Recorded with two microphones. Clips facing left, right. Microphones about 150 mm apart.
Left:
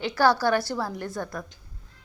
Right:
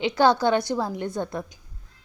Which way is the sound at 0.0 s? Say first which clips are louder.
Right 2 dB; 20° right (ahead or behind).